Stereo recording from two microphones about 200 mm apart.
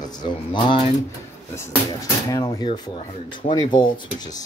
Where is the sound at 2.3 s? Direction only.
20° left (ahead or behind).